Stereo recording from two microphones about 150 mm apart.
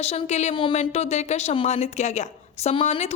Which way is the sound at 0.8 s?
45° left (ahead or behind).